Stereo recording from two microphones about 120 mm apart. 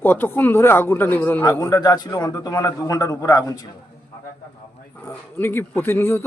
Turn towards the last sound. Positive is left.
turn(degrees=20)  # may be behind; listen again after turning